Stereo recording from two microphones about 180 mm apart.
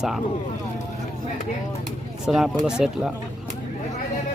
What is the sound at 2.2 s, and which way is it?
Speech, centre (ahead or behind).